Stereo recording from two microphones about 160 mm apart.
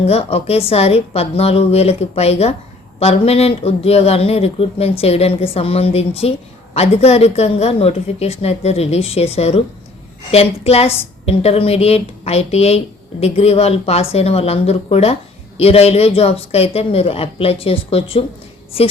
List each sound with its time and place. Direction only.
0.0 s a woman's voice: 40° left (ahead or behind)